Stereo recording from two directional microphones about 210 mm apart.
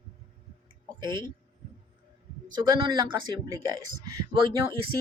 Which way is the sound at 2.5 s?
20° right (ahead or behind).